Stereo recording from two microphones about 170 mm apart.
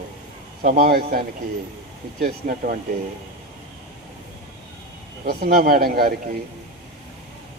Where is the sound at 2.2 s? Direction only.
55° right (ahead or behind).